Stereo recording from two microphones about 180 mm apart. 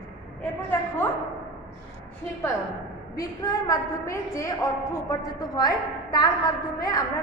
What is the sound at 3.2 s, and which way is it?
A woman's voice, 20° left (ahead or behind).